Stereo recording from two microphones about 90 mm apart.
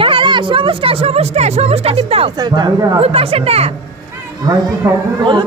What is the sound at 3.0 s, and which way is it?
Speech, 90° right.